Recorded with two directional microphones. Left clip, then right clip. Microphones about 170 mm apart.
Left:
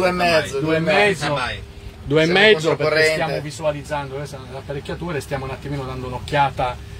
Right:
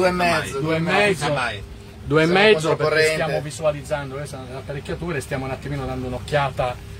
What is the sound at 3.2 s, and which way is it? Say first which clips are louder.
A man's voice: even; 15° left (ahead or behind).